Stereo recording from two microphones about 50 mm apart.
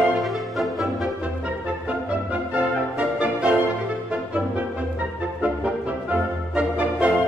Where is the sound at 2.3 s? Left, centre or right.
Right.